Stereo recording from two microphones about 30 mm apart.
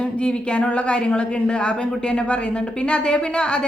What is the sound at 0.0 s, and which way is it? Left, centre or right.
A woman's voice, left.